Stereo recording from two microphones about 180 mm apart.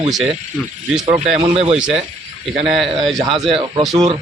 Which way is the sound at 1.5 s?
35° right (ahead or behind).